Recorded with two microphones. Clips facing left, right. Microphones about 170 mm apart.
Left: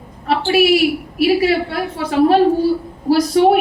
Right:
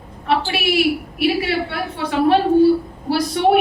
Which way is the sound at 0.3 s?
40° left (ahead or behind).